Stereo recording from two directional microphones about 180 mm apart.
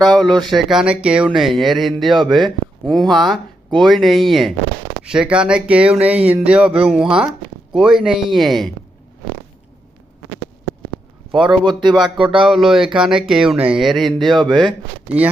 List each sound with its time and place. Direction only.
0.0 s speech: 5° left (ahead or behind)
11.3 s a man's voice: 5° right (ahead or behind)
11.6 s speech: 25° right (ahead or behind)
12.5 s speech: centre (ahead or behind)